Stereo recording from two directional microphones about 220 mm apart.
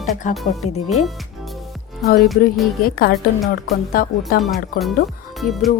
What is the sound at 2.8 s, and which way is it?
Speech, 40° left (ahead or behind).